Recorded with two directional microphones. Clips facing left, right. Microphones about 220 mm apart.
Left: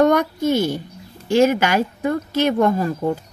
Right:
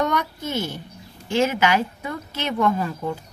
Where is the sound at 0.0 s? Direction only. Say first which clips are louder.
Left 9 dB; 45° left (ahead or behind).